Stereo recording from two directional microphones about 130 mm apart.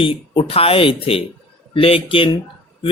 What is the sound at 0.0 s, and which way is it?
Speech, 45° left (ahead or behind).